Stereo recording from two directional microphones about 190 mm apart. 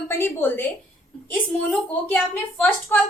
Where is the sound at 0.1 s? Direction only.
10° left (ahead or behind).